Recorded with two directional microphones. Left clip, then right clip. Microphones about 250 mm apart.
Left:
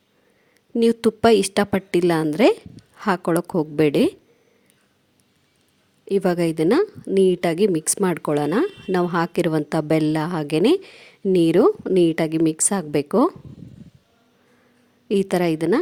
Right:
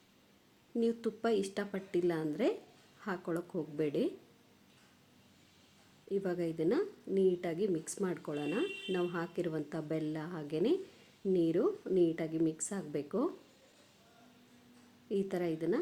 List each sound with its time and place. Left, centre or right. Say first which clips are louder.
0.8 s a woman's voice: left 16 dB; left
6.1 s a woman's voice: left 15 dB; left
15.1 s a woman's voice: left 15 dB; left